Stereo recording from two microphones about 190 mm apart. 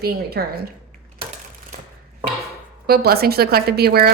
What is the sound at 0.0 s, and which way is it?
Speech, 55° right (ahead or behind).